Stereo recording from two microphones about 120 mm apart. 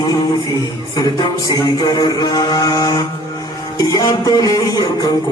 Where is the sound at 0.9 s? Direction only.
35° left (ahead or behind).